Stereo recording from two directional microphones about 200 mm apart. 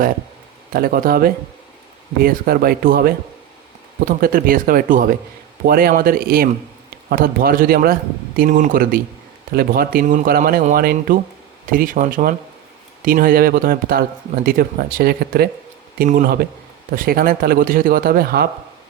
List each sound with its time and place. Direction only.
0.7 s speech: 45° right (ahead or behind)